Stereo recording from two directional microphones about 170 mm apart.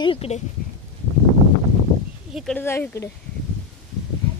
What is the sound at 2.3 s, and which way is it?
Speech, centre (ahead or behind).